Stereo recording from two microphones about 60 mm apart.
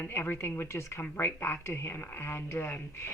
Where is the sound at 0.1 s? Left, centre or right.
Left.